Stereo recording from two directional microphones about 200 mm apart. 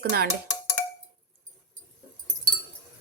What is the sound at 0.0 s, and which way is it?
Speech, 50° right (ahead or behind).